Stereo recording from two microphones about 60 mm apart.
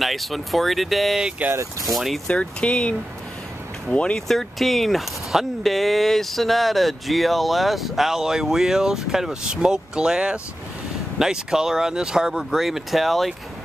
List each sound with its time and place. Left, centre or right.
0.0 s speech: centre
2.2 s speech: centre
4.3 s speech: centre